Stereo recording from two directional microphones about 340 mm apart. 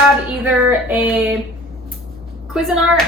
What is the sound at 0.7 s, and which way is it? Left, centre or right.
Speech, centre.